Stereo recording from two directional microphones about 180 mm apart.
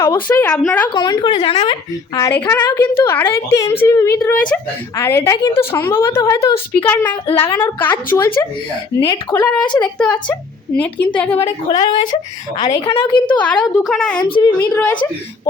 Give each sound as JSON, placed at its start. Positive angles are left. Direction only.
{"t": 0.0, "sound": "a woman's voice", "side_deg": 10}
{"t": 0.9, "sound": "speech", "side_deg": 25}
{"t": 2.1, "sound": "a woman's voice", "side_deg": 15}
{"t": 10.0, "sound": "a woman's voice", "side_deg": 5}
{"t": 11.8, "sound": "speech", "side_deg": 25}
{"t": 13.4, "sound": "a woman's voice", "side_deg": 5}
{"t": 14.2, "sound": "speech", "side_deg": 30}
{"t": 14.6, "sound": "a woman's voice", "side_deg": 5}